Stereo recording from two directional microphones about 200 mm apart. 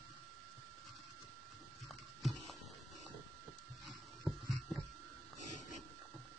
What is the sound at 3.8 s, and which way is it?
Printer, centre (ahead or behind).